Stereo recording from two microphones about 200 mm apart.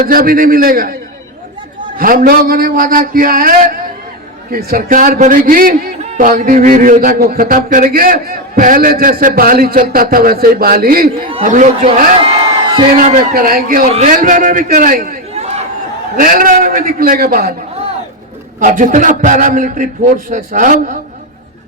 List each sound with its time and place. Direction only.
0.1 s a man's voice: 45° right (ahead or behind)
2.0 s a man's voice: 45° right (ahead or behind)
15.4 s chatter: 30° right (ahead or behind)
16.1 s a man's voice: 45° right (ahead or behind)
18.6 s a man's voice: 40° right (ahead or behind)